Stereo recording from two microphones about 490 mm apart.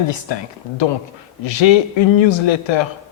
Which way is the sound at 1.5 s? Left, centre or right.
Left.